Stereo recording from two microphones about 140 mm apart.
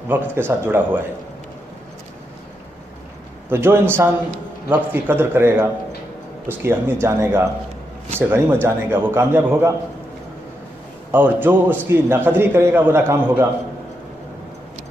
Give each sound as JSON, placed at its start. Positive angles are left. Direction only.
{"t": 0.1, "sound": "a man's voice", "side_deg": -15}
{"t": 3.4, "sound": "a man's voice", "side_deg": -15}
{"t": 11.1, "sound": "a man's voice", "side_deg": -15}